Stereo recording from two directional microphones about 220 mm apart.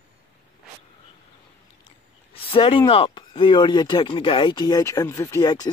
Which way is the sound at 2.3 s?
25° left (ahead or behind).